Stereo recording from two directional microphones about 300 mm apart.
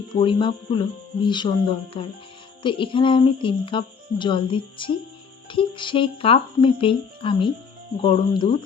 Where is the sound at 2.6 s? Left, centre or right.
Centre.